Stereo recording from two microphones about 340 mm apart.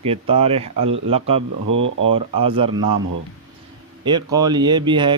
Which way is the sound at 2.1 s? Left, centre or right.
Centre.